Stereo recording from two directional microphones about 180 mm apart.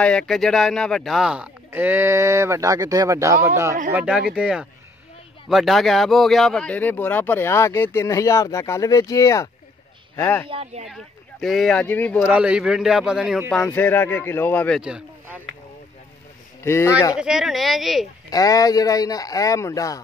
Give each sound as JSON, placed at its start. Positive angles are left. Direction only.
{"t": 0.0, "sound": "a man's voice", "side_deg": 5}
{"t": 10.5, "sound": "speech", "side_deg": -35}
{"t": 10.9, "sound": "speech", "side_deg": 0}
{"t": 12.3, "sound": "a man's voice", "side_deg": -5}
{"t": 14.8, "sound": "speech", "side_deg": -5}
{"t": 16.6, "sound": "speech", "side_deg": 15}
{"t": 17.2, "sound": "a man's voice", "side_deg": -5}
{"t": 18.3, "sound": "speech", "side_deg": 20}